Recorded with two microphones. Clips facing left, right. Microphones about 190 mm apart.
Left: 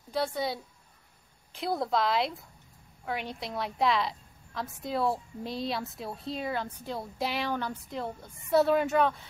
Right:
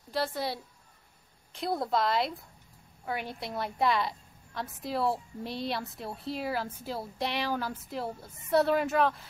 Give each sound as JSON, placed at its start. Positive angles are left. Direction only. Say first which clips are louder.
{"t": 0.1, "sound": "a woman's voice", "louder": "left 1 dB", "side_deg": 0}